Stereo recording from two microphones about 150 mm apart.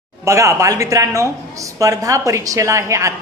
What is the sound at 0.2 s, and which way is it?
A woman's voice, 20° right (ahead or behind).